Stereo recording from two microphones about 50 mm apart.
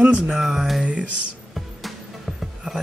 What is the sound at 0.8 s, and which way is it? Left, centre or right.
Speech, right.